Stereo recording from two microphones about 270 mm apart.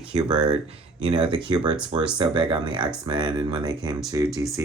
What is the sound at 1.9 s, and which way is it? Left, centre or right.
Speech, centre.